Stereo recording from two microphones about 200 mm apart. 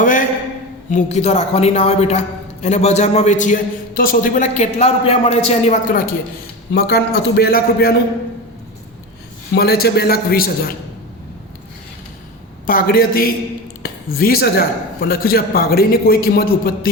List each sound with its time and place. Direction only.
0.0 s a sound: 40° left (ahead or behind)
0.9 s a man's voice: 35° left (ahead or behind)
6.7 s speech: 55° left (ahead or behind)
9.6 s speech: 50° left (ahead or behind)
12.6 s speech: 45° left (ahead or behind)